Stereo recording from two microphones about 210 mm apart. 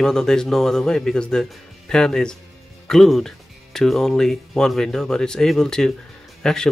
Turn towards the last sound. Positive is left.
turn(degrees=5)  # may be behind; listen again after turning